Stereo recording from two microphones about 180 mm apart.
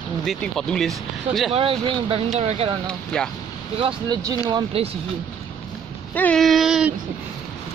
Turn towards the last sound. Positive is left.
turn(degrees=-5)  # may be behind; listen again after turning